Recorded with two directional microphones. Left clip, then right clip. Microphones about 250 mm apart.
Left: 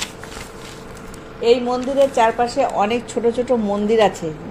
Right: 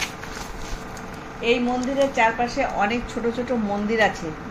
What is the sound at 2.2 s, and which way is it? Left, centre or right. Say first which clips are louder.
Speech: left 4 dB; left.